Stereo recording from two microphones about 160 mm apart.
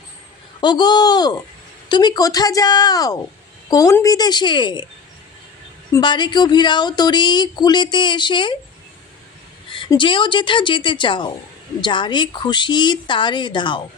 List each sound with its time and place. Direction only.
0.6 s speech: 25° left (ahead or behind)
5.9 s speech: 30° left (ahead or behind)
9.7 s speech: 30° left (ahead or behind)